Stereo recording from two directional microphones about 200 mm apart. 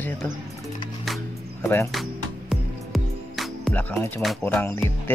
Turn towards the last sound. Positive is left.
turn(degrees=10)  # may be behind; listen again after turning